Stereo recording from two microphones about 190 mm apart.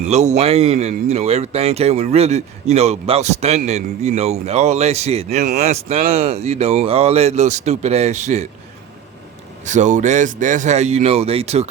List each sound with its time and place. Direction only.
0.0 s a man's voice: 35° right (ahead or behind)
9.6 s a man's voice: 40° right (ahead or behind)